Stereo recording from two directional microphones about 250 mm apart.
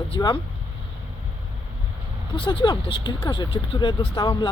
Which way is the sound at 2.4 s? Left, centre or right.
Centre.